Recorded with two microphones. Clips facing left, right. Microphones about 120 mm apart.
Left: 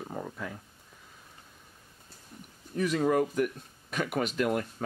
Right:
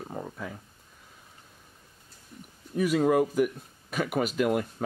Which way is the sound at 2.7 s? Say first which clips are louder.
Right 3 dB; 5° right (ahead or behind).